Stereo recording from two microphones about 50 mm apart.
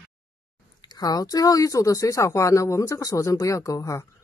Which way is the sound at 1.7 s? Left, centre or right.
Left.